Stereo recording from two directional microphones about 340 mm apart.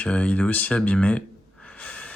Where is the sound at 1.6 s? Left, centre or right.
Centre.